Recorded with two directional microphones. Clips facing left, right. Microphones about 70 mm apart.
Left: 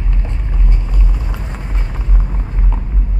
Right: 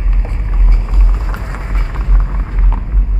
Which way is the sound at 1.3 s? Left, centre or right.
Right.